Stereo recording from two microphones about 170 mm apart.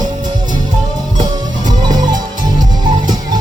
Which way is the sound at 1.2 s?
25° right (ahead or behind).